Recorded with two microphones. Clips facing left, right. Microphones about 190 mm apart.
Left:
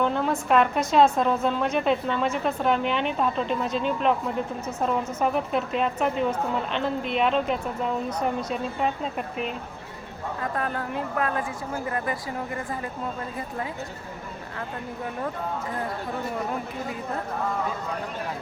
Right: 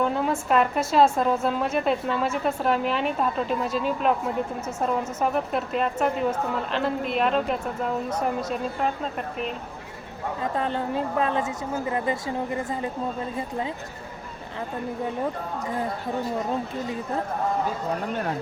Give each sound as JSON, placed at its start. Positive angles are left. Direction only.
{"t": 0.0, "sound": "speech", "side_deg": -5}
{"t": 10.4, "sound": "speech", "side_deg": -25}